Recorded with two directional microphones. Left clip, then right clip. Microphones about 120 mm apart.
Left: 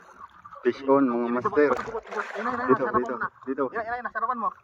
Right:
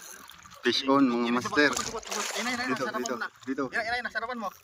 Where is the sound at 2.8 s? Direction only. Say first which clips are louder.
Left 5 dB; 10° left (ahead or behind).